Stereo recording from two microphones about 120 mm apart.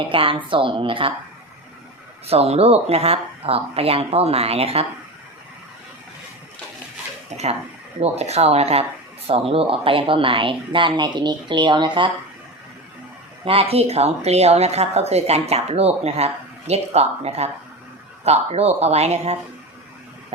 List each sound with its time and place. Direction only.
0.1 s speech: 45° right (ahead or behind)
2.2 s a woman's voice: 60° right (ahead or behind)
8.0 s a woman's voice: 65° right (ahead or behind); by 12.1 s 40° right (ahead or behind)
13.4 s a woman's voice: 55° right (ahead or behind)